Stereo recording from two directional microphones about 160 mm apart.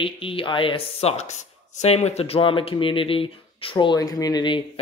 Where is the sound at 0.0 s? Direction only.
35° left (ahead or behind).